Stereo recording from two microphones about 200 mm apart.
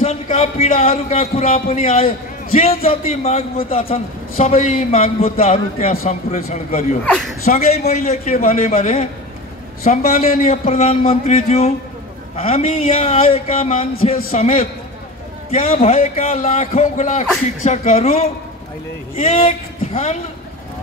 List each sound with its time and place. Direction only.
0.0 s a sound: 30° left (ahead or behind)
0.7 s a man's voice: 30° left (ahead or behind)
9.8 s a man's voice: 45° left (ahead or behind)
10.4 s a man's voice: 30° left (ahead or behind)
19.9 s a woman's voice: 35° left (ahead or behind)